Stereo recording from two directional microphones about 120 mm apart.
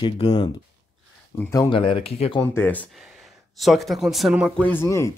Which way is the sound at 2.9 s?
Centre (ahead or behind).